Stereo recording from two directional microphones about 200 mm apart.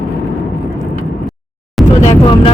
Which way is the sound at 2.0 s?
30° left (ahead or behind).